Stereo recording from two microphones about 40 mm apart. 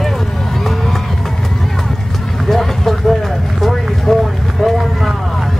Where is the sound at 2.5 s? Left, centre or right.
Centre.